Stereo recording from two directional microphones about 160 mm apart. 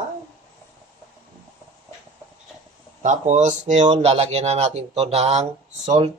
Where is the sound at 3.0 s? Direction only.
50° right (ahead or behind).